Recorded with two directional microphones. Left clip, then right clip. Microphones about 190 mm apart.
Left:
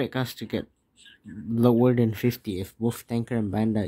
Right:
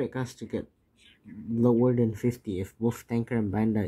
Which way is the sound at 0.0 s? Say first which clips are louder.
Left 3 dB; 20° left (ahead or behind).